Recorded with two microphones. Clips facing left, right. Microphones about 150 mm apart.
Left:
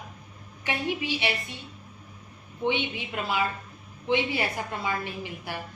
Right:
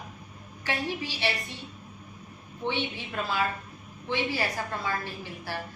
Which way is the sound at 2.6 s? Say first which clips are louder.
Left 3 dB; 15° left (ahead or behind).